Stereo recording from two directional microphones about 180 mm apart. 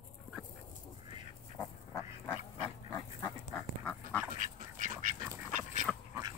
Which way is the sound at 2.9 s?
15° left (ahead or behind).